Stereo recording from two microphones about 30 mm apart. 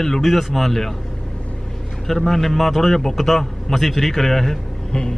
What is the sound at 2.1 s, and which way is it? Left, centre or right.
A man's voice, centre.